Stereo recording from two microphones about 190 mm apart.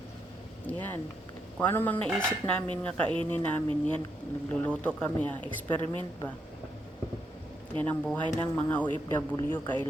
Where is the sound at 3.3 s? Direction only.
10° left (ahead or behind).